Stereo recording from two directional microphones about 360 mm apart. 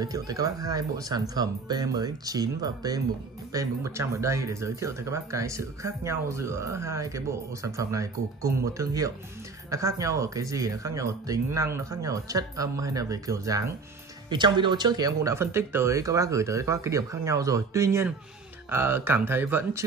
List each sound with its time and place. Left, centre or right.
0.0 s speech: centre